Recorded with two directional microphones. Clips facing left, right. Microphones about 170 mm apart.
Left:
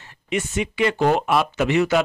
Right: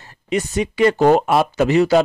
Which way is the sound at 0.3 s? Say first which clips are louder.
Right 4 dB; 40° right (ahead or behind).